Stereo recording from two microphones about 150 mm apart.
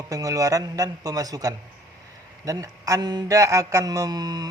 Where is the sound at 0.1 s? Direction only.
25° right (ahead or behind).